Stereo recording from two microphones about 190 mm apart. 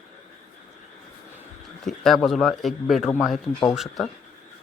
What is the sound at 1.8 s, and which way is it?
Speech, centre (ahead or behind).